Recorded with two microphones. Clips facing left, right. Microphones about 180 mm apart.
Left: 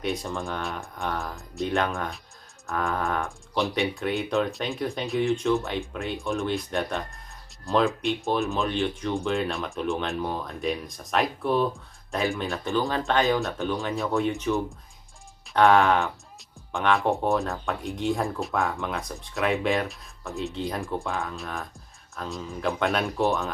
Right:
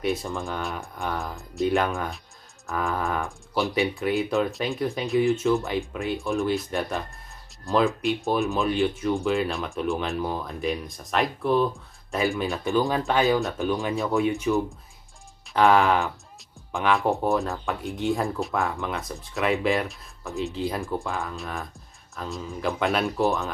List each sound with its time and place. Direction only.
0.0 s speech: centre (ahead or behind)
12.6 s speech: 15° right (ahead or behind)